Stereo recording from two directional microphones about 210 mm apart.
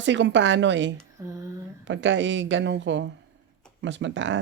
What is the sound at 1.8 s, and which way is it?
Speech, 60° right (ahead or behind).